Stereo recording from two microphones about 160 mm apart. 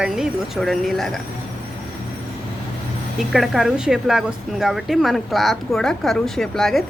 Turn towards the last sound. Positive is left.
turn(degrees=0)  # may be behind; listen again after turning